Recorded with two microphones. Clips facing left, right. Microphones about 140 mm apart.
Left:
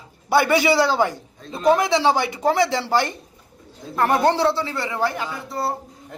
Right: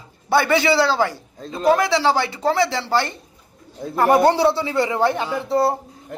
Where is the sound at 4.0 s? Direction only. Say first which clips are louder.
Right 3 dB; 10° right (ahead or behind); by 5.7 s 25° right (ahead or behind).